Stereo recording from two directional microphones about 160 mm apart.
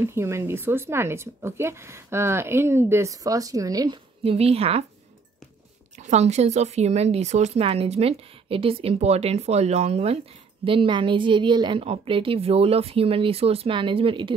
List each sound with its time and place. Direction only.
0.0 s speech: 15° right (ahead or behind)
4.2 s a woman's voice: 40° right (ahead or behind)
5.9 s a woman's voice: 45° right (ahead or behind)